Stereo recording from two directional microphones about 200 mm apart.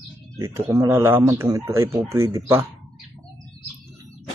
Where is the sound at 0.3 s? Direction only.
15° right (ahead or behind).